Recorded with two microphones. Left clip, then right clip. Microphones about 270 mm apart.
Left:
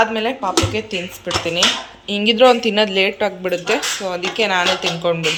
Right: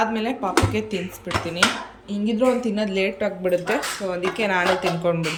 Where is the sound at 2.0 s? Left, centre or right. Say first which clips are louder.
Left 11 dB; centre.